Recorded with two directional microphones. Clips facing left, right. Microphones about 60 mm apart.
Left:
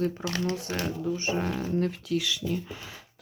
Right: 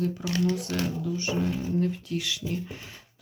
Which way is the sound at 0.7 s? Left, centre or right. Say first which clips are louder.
Even; left.